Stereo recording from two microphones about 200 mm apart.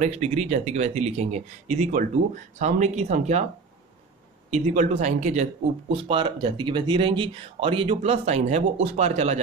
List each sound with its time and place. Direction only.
0.0 s speech: 30° right (ahead or behind)
4.5 s speech: 35° right (ahead or behind)